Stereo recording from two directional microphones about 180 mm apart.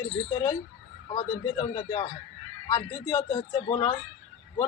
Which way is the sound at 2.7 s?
20° left (ahead or behind).